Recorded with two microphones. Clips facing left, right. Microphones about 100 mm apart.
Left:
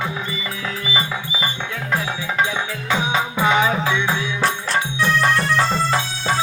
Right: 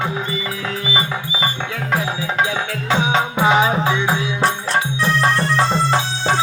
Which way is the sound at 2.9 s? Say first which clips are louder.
Right 3 dB; 25° right (ahead or behind).